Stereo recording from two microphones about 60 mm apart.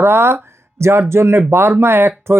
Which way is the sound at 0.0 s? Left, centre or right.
Right.